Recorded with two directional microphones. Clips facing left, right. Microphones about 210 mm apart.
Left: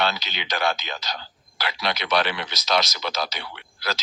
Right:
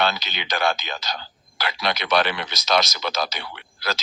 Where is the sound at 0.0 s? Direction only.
50° right (ahead or behind).